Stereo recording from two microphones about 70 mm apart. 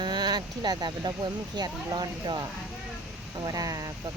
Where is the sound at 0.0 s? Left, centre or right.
Right.